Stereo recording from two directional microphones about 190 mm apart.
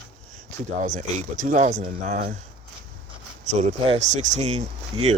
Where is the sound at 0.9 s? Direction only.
45° right (ahead or behind).